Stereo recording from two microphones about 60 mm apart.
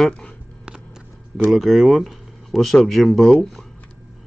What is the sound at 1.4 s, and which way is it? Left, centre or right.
Speech, centre.